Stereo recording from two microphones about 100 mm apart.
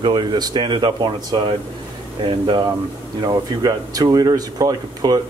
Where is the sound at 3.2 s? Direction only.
40° right (ahead or behind).